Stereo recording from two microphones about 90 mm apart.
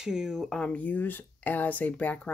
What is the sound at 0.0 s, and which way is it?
Speech, 5° right (ahead or behind).